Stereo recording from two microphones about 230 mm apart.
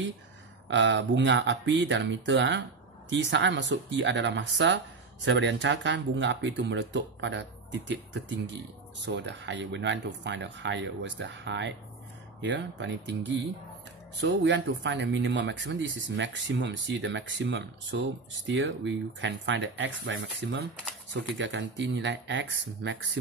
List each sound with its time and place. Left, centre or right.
0.7 s speech: right